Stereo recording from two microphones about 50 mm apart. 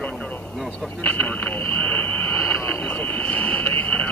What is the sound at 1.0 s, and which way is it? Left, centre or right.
Speech, left.